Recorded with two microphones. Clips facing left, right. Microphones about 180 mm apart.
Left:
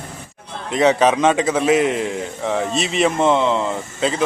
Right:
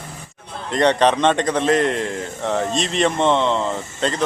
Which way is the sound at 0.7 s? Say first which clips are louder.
Left 1 dB; 5° left (ahead or behind).